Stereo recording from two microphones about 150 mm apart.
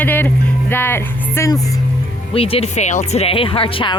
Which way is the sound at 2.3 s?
40° left (ahead or behind).